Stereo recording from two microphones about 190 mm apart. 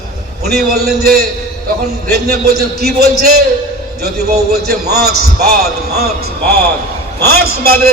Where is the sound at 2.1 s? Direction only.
55° right (ahead or behind).